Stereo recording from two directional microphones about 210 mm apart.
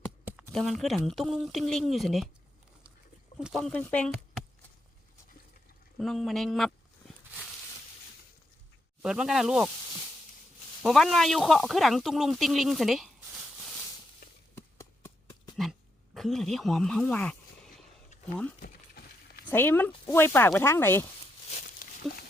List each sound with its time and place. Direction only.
0.3 s speech: 5° right (ahead or behind)
3.3 s speech: centre (ahead or behind)
6.0 s speech: centre (ahead or behind)
9.0 s speech: 5° right (ahead or behind)
10.8 s speech: centre (ahead or behind)
14.5 s a sound: 15° left (ahead or behind)
16.1 s speech: centre (ahead or behind)
19.5 s speech: 10° left (ahead or behind)
21.5 s a sound: 40° left (ahead or behind)